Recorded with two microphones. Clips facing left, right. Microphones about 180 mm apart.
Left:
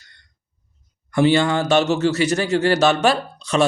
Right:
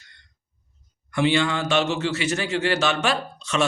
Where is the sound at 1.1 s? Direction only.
40° left (ahead or behind).